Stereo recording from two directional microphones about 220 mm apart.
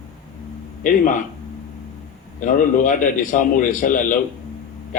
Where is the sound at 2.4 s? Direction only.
35° left (ahead or behind).